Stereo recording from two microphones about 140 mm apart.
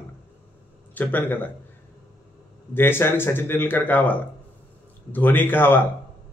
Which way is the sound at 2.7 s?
15° left (ahead or behind).